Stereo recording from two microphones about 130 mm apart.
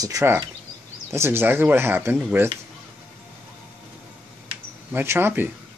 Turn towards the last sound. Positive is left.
turn(degrees=-15)  # may be behind; listen again after turning